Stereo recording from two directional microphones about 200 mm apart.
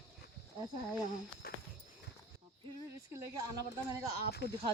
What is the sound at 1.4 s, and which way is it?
Dog, 50° left (ahead or behind).